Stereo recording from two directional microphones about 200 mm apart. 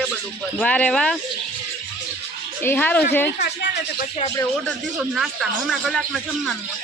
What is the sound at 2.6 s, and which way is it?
Speech, 10° left (ahead or behind).